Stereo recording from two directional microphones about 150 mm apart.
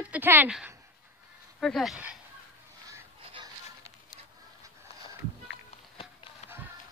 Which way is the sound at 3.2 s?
35° right (ahead or behind).